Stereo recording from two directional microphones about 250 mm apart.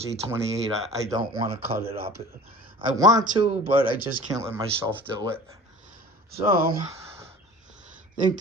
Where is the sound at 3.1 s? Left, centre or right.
Centre.